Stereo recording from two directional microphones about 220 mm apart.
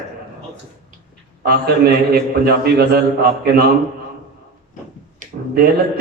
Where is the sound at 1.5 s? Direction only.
45° right (ahead or behind).